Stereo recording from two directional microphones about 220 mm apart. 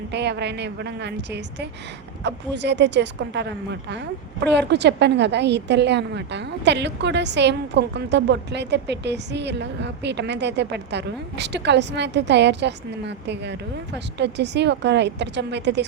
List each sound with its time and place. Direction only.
0.1 s a woman's voice: 50° right (ahead or behind)